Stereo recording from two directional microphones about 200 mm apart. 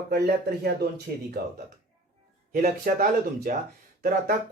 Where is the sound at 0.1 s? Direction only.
50° right (ahead or behind).